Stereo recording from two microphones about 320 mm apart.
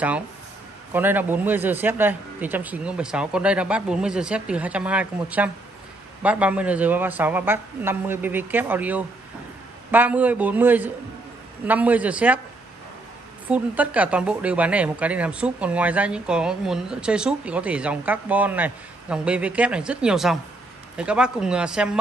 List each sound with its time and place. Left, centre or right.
0.9 s speech: centre
13.5 s speech: centre